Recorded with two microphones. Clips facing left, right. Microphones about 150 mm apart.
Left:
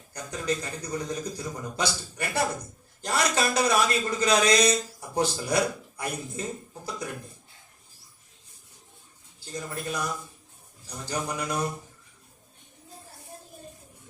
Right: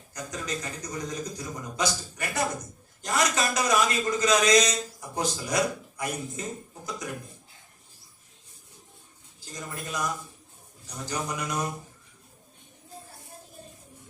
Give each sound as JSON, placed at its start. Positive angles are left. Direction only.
{"t": 0.1, "sound": "a man's voice", "side_deg": 30}
{"t": 9.4, "sound": "a man's voice", "side_deg": 30}
{"t": 11.0, "sound": "a man's voice", "side_deg": 30}